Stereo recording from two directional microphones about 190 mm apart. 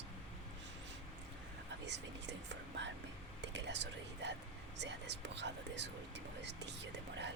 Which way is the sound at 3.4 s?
65° right (ahead or behind).